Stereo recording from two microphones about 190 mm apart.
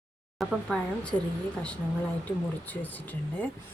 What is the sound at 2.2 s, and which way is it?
A woman's voice, 10° left (ahead or behind).